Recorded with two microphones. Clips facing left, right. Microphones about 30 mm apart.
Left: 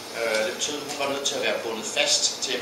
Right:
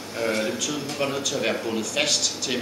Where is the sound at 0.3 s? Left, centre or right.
Left.